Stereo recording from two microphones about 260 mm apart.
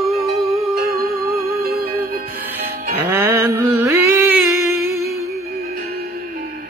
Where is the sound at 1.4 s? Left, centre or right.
Right.